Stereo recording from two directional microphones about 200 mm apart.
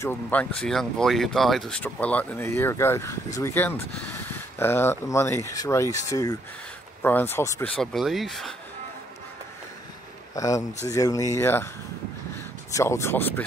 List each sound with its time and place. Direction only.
0.0 s speech: 10° left (ahead or behind)
10.3 s speech: 15° left (ahead or behind)
12.7 s speech: 15° left (ahead or behind)